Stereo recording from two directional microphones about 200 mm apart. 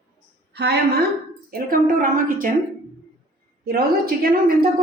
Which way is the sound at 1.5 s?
45° right (ahead or behind).